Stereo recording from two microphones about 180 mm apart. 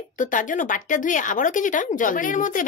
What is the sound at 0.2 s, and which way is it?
Speech, 45° left (ahead or behind).